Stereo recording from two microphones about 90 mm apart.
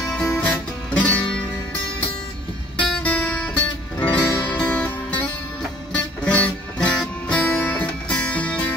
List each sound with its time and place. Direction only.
0.0 s music: 10° left (ahead or behind)
3.0 s music: 10° left (ahead or behind)